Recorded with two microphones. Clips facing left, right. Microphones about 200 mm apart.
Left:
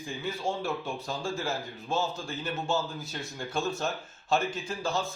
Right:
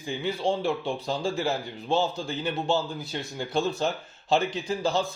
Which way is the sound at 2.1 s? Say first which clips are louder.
Right 5 dB; 15° right (ahead or behind).